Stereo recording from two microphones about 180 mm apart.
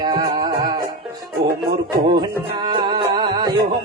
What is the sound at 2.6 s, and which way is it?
Music, 25° right (ahead or behind).